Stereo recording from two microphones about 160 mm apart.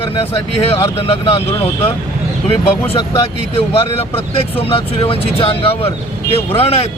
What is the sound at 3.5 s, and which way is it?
Speech, 35° left (ahead or behind).